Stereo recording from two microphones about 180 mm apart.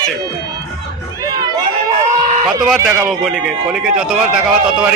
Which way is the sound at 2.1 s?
40° right (ahead or behind).